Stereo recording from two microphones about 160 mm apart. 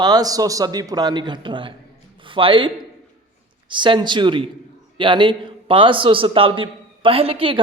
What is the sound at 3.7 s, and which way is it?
A man's voice, 30° right (ahead or behind).